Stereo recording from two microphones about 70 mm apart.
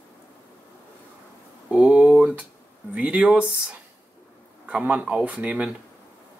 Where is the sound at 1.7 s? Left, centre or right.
Centre.